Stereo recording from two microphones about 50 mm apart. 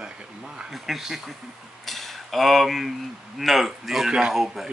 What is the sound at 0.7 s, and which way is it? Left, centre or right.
A man's voice, centre.